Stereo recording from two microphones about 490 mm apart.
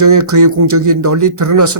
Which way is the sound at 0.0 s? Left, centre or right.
Right.